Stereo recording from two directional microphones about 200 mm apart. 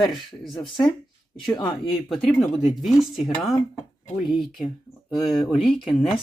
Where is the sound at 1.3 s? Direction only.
25° left (ahead or behind).